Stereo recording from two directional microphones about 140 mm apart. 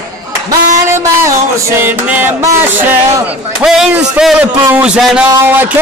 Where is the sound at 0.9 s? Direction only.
20° right (ahead or behind).